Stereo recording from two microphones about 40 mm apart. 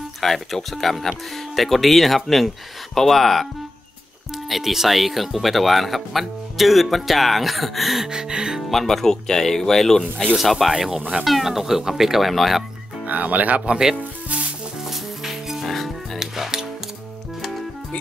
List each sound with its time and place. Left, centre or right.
0.2 s speech: centre
4.5 s speech: centre
8.1 s music: centre
8.6 s speech: centre
10.3 s speech: centre
13.0 s speech: right
13.7 s music: centre
15.6 s music: centre
16.2 s music: centre